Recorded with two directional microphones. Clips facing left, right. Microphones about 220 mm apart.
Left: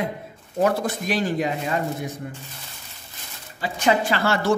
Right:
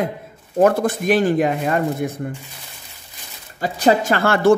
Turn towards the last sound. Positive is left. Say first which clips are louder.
# right 6 dB
turn(degrees=-55)  # may be behind; listen again after turning